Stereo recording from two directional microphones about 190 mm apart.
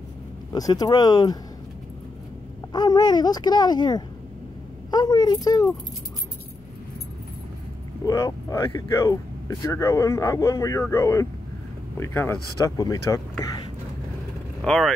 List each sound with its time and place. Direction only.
0.5 s speech: 20° left (ahead or behind)
2.7 s speech: 20° left (ahead or behind)
8.0 s speech: 15° left (ahead or behind)
14.6 s speech: centre (ahead or behind)